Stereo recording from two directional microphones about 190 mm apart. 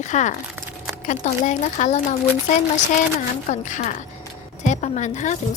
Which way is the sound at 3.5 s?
40° left (ahead or behind).